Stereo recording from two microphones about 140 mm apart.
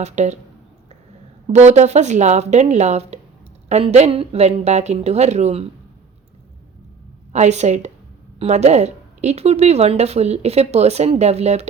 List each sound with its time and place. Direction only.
0.0 s speech: 55° right (ahead or behind)
1.5 s speech: 55° right (ahead or behind)
7.3 s speech: 55° right (ahead or behind)